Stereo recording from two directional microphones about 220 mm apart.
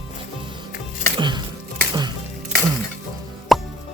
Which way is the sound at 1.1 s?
20° right (ahead or behind).